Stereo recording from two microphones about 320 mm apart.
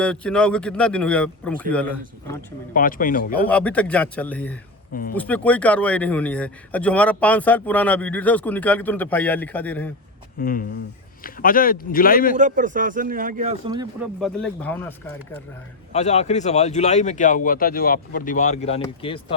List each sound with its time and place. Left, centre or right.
0.0 s a man's voice: centre
2.7 s speech: left
3.4 s a man's voice: centre
10.3 s speech: left
12.4 s speech: right
14.2 s a man's voice: centre
15.9 s speech: left